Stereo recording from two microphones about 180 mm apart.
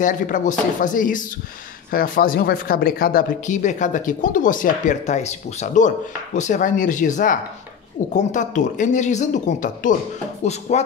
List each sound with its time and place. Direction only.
0.0 s speech: 45° left (ahead or behind)